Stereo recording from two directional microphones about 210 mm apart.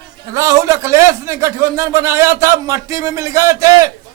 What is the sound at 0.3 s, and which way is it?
A man's voice, 15° right (ahead or behind).